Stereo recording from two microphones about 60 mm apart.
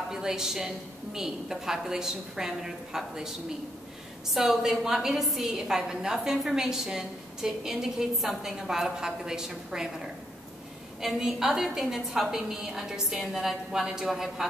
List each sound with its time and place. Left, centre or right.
0.1 s a woman's voice: centre
4.3 s a woman's voice: centre